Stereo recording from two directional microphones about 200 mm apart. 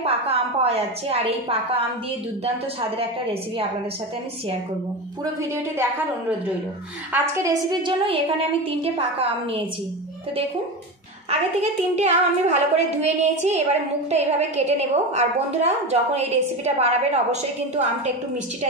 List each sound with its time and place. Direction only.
0.0 s a woman's voice: 30° right (ahead or behind)
7.8 s a woman's voice: 25° right (ahead or behind)
11.2 s a woman's voice: 35° right (ahead or behind)